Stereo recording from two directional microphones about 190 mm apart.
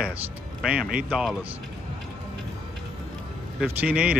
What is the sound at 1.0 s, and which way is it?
Mantra, centre (ahead or behind).